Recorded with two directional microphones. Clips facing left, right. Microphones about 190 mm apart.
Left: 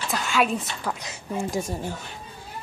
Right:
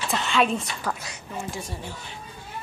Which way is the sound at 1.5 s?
45° left (ahead or behind).